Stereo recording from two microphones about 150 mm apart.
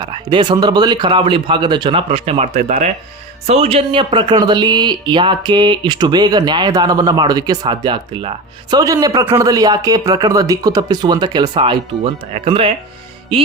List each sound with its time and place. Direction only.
0.0 s speech: 30° right (ahead or behind)